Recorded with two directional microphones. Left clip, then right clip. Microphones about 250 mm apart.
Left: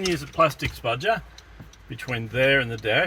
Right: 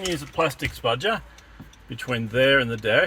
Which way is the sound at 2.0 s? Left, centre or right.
Right.